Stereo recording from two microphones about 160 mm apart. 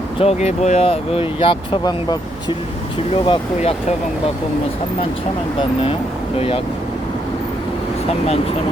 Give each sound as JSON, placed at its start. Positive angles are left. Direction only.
{"t": 0.2, "sound": "speech", "side_deg": 40}
{"t": 3.2, "sound": "speech", "side_deg": 40}